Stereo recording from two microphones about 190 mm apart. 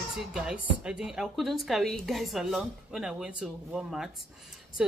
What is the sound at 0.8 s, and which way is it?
A woman's voice, 5° right (ahead or behind).